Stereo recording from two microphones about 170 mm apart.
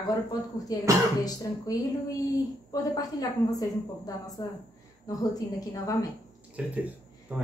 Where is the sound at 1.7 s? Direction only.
20° left (ahead or behind).